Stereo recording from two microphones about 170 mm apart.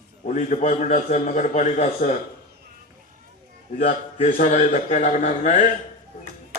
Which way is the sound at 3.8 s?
45° left (ahead or behind).